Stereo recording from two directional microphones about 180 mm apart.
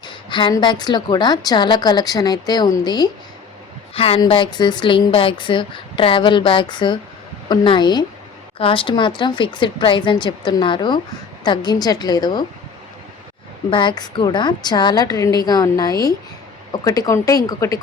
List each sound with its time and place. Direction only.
0.1 s a woman's voice: 25° left (ahead or behind)
13.7 s a woman's voice: 25° left (ahead or behind)